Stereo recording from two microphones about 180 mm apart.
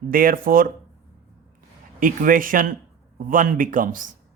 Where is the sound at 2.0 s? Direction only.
50° right (ahead or behind).